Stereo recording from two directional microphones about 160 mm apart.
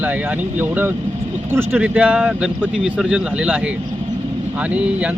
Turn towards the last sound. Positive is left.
turn(degrees=-5)  # may be behind; listen again after turning